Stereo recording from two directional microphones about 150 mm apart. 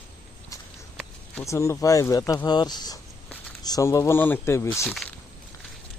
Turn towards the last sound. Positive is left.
turn(degrees=0)  # may be behind; listen again after turning